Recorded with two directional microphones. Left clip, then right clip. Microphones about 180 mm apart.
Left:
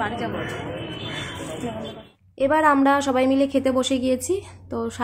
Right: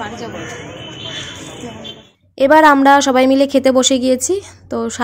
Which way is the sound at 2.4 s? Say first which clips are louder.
Right 9 dB; 50° right (ahead or behind).